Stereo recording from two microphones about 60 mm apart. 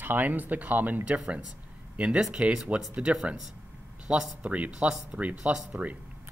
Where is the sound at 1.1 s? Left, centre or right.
Centre.